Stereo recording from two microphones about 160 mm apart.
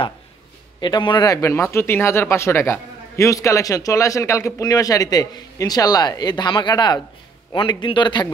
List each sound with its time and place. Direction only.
0.7 s speech: 25° left (ahead or behind)